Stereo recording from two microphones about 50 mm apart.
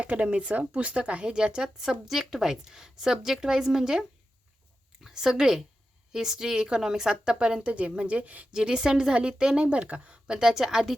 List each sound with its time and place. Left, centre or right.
0.0 s speech: right
5.0 s a woman's voice: centre; by 8.4 s right
8.5 s speech: centre